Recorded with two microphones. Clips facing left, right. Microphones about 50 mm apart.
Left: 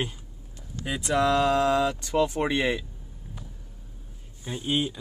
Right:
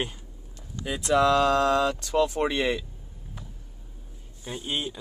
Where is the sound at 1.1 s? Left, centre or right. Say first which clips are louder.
Right 2 dB; centre.